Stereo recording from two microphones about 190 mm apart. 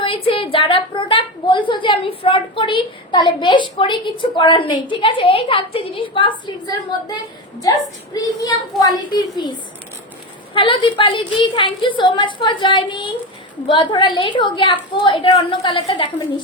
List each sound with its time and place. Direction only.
0.0 s a woman's voice: 30° left (ahead or behind)
7.6 s a woman's voice: 20° left (ahead or behind)
10.5 s a woman's voice: 25° left (ahead or behind)